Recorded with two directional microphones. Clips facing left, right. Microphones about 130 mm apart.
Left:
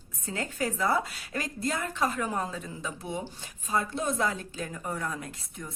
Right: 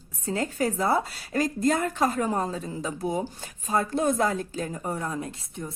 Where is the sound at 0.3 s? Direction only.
35° right (ahead or behind).